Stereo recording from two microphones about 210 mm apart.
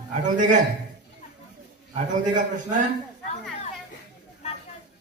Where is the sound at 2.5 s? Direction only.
35° right (ahead or behind).